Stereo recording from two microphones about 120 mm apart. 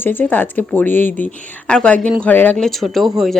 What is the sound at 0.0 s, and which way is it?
Speech, 15° left (ahead or behind).